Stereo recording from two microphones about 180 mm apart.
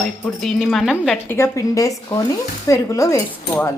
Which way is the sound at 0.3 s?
Centre (ahead or behind).